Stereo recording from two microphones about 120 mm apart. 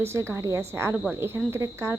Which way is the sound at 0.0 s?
20° right (ahead or behind).